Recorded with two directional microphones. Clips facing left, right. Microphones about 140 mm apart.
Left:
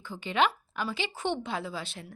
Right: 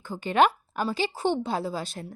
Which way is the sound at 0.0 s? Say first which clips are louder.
Right 5 dB; 45° right (ahead or behind).